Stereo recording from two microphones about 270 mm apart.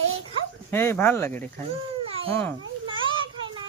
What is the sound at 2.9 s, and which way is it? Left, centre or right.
Children playing, centre.